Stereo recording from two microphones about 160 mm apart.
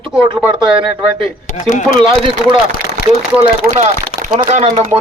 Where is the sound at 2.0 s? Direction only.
30° right (ahead or behind).